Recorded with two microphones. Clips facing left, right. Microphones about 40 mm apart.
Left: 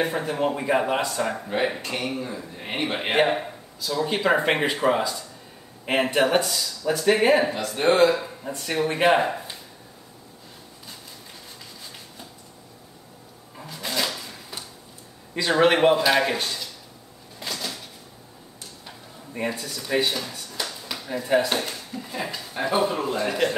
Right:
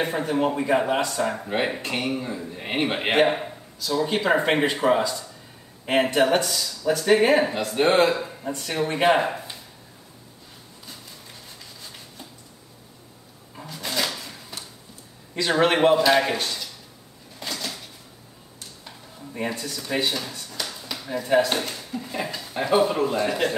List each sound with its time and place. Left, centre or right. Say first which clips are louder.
0.0 s speech: right 1 dB; centre
1.4 s speech: even; centre
2.6 s speech: right 3 dB; centre
2.9 s speech: right 1 dB; centre
7.5 s speech: right 1 dB; right
8.2 s speech: right 2 dB; centre
13.6 s drawer open or close: even; centre
15.4 s speech: left 1 dB; centre
17.4 s a sound: even; centre
19.3 s speech: even; centre
20.5 s a sound: left 1 dB; centre
22.5 s speech: right 3 dB; centre